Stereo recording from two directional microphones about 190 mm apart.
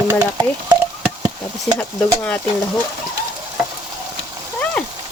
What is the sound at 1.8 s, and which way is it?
Speech, 5° left (ahead or behind).